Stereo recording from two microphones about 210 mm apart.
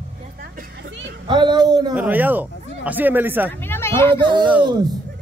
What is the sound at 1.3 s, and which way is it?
Speech, 20° right (ahead or behind).